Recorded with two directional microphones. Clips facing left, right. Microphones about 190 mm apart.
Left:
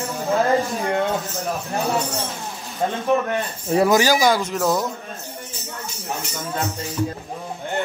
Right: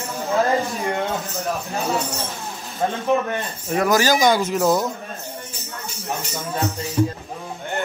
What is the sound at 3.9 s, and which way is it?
Speech, 15° left (ahead or behind).